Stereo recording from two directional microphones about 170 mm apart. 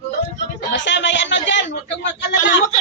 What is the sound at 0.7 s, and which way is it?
Speech, 90° left.